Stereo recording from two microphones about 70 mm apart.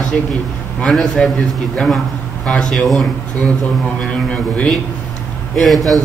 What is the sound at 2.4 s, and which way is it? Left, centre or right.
Speech, centre.